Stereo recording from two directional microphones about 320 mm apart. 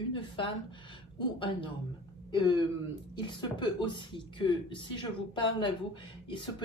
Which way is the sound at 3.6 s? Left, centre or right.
Centre.